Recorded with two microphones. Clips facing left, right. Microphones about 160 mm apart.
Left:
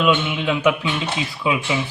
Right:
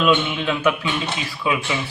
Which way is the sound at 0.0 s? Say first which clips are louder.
Even; 10° left (ahead or behind).